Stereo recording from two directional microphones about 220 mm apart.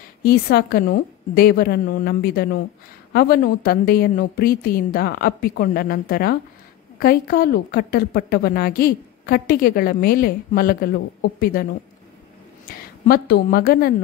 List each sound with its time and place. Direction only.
0.2 s a woman's voice: 45° left (ahead or behind)
12.6 s a woman's voice: 40° left (ahead or behind)